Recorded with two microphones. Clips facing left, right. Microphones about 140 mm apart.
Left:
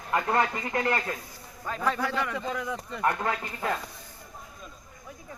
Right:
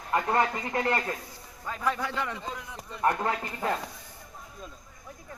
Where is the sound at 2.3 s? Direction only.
75° left (ahead or behind).